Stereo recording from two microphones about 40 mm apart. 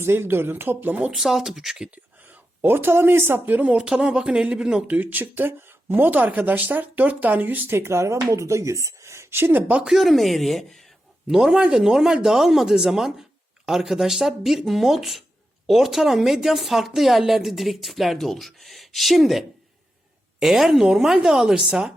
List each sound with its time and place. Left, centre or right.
0.0 s speech: right
1.1 s speech: centre
2.2 s speech: right
3.7 s speech: right
4.9 s speech: right
6.1 s speech: right
7.7 s speech: right
9.5 s speech: right
9.8 s a woman's voice: centre
11.3 s a woman's voice: centre